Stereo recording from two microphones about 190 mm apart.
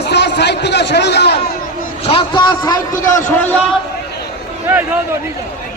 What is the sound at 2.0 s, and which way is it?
A man's voice, 30° left (ahead or behind).